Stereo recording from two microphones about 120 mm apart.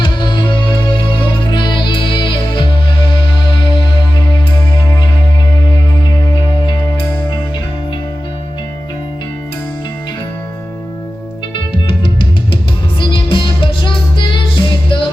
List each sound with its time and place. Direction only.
1.5 s music: 40° left (ahead or behind)
13.0 s music: 45° left (ahead or behind)